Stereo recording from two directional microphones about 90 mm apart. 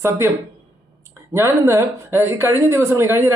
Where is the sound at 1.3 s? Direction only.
30° right (ahead or behind).